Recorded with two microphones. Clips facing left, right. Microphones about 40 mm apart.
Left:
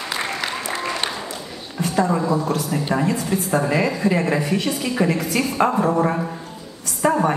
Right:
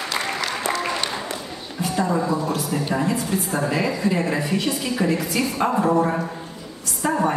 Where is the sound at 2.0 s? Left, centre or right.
Centre.